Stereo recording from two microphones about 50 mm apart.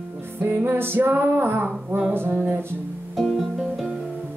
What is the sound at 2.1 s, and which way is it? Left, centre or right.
Music, right.